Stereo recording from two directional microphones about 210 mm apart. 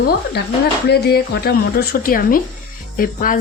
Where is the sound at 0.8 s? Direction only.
50° left (ahead or behind).